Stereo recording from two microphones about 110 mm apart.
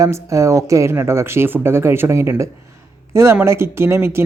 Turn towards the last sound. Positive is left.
turn(degrees=-25)  # may be behind; listen again after turning